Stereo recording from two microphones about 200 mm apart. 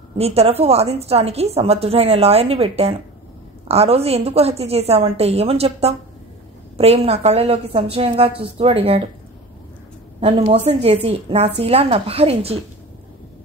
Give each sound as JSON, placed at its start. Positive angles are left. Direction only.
{"t": 0.2, "sound": "a woman's voice", "side_deg": -30}
{"t": 10.2, "sound": "a woman's voice", "side_deg": -30}